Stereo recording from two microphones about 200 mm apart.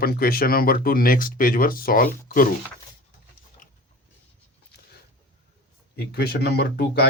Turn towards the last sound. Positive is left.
turn(degrees=55)  # may be behind; listen again after turning